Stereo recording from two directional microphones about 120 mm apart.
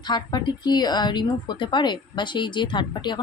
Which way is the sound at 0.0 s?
35° left (ahead or behind).